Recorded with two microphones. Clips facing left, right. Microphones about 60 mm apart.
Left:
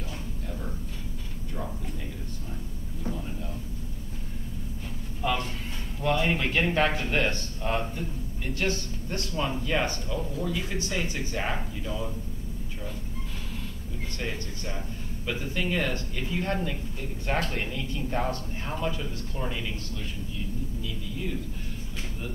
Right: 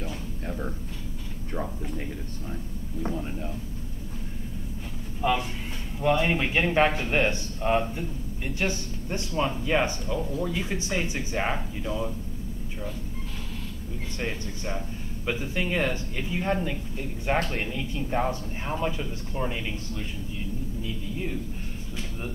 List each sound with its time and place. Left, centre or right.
3.0 s vehicle: right
5.2 s speech: centre
15.2 s speech: centre